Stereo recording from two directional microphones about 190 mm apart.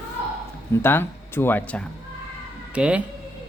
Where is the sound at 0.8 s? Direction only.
10° left (ahead or behind).